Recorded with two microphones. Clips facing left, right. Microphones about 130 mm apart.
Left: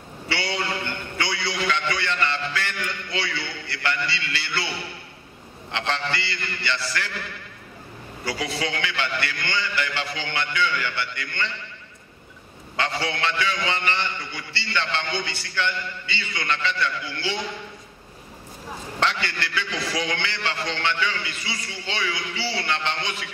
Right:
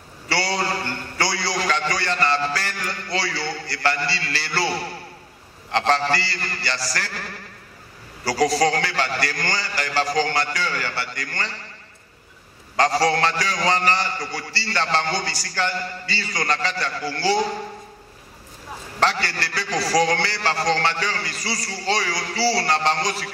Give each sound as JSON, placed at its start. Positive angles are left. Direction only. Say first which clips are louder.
{"t": 0.3, "sound": "a man's voice", "louder": "right 4 dB", "side_deg": -35}
{"t": 12.7, "sound": "a man's voice", "louder": "right 8 dB", "side_deg": -40}
{"t": 18.9, "sound": "a man's voice", "louder": "right 4 dB", "side_deg": -40}